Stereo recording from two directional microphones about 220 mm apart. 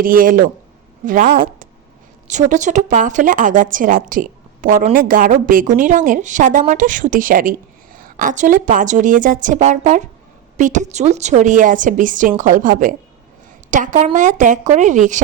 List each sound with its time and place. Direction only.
0.0 s a woman's voice: 40° right (ahead or behind)